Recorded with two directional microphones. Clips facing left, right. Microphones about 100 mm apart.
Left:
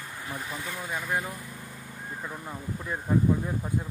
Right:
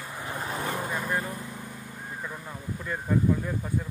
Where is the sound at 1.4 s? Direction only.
20° right (ahead or behind).